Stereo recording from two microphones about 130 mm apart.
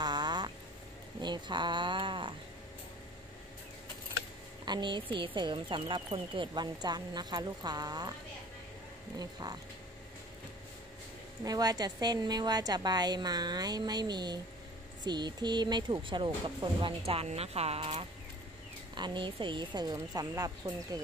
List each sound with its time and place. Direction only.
0.0 s a sound: 35° right (ahead or behind)
1.2 s speech: 35° right (ahead or behind)
4.6 s speech: 35° right (ahead or behind)
9.2 s speech: 30° right (ahead or behind)
11.4 s speech: 30° right (ahead or behind); by 18.0 s 50° right (ahead or behind)
18.9 s speech: 35° right (ahead or behind)